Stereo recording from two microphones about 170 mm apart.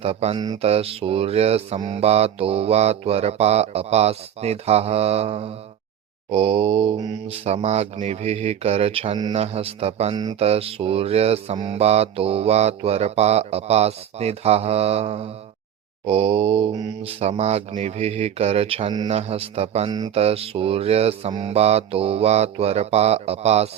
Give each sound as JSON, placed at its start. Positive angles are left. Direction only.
{"t": 0.0, "sound": "mantra", "side_deg": -35}
{"t": 0.3, "sound": "mantra", "side_deg": -20}
{"t": 0.6, "sound": "mantra", "side_deg": -35}
{"t": 7.4, "sound": "mantra", "side_deg": -40}